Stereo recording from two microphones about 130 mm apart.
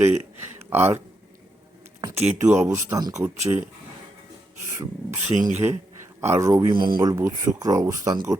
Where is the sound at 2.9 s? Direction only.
25° right (ahead or behind).